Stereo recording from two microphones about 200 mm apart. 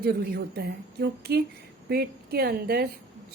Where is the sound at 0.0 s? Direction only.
50° right (ahead or behind).